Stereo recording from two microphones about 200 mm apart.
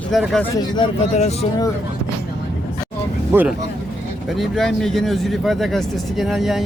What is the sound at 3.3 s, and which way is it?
Speech, 10° right (ahead or behind).